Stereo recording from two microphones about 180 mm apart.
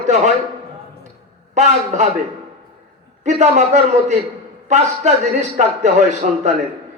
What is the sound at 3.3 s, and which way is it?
A man's voice, 40° right (ahead or behind).